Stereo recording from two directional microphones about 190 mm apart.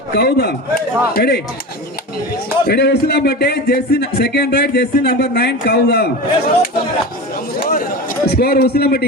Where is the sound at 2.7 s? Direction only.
60° left (ahead or behind).